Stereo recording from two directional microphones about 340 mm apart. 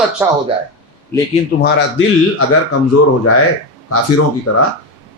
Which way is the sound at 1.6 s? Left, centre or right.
Left.